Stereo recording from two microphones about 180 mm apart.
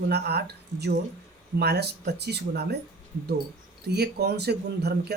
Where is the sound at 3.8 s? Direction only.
65° right (ahead or behind).